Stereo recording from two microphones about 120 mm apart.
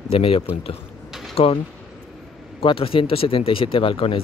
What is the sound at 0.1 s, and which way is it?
Speech, 50° left (ahead or behind).